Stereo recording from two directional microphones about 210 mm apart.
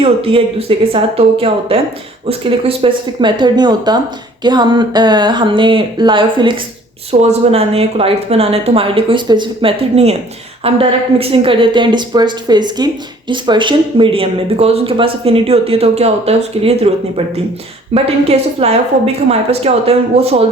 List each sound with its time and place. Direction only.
0.0 s a woman's voice: 25° right (ahead or behind)
17.9 s a woman's voice: 30° right (ahead or behind)